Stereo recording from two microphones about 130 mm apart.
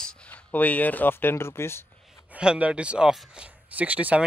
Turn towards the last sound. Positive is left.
turn(degrees=-10)  # may be behind; listen again after turning